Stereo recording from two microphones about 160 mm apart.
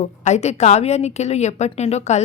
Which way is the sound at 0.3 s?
45° left (ahead or behind).